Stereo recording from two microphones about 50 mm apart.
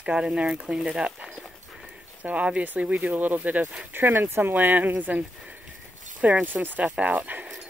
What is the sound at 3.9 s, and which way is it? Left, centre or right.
Speech, right.